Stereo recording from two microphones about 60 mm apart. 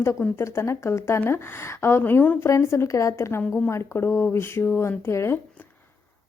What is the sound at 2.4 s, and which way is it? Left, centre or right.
A woman's voice, left.